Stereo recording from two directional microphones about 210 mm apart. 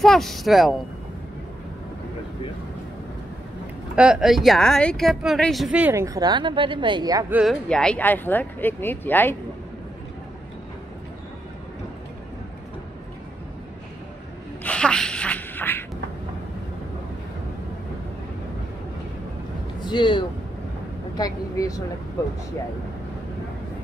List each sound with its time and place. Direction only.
0.0 s a woman's voice: centre (ahead or behind)
3.9 s a woman's voice: 5° right (ahead or behind)
7.3 s speech: centre (ahead or behind)
14.6 s a sound: 5° left (ahead or behind)
19.8 s speech: 20° left (ahead or behind)